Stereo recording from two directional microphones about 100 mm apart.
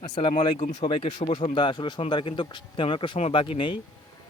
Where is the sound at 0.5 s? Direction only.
75° left (ahead or behind).